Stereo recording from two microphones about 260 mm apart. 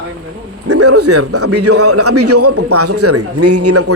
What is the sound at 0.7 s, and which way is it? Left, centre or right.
A man's voice, right.